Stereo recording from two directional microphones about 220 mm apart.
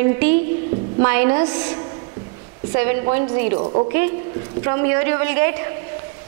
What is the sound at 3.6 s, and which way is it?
Speech, 30° right (ahead or behind).